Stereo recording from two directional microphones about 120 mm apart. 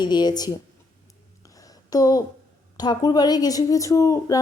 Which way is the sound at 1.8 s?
30° left (ahead or behind).